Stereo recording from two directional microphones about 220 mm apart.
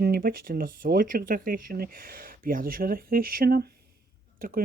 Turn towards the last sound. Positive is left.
turn(degrees=-40)  # may be behind; listen again after turning